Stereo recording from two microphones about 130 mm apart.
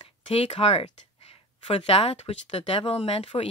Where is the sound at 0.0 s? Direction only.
50° left (ahead or behind).